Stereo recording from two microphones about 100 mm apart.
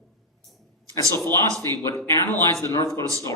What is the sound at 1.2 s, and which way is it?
Speech, 30° left (ahead or behind).